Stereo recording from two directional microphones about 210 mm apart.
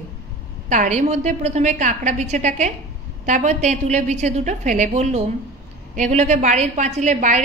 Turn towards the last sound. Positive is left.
turn(degrees=-35)  # may be behind; listen again after turning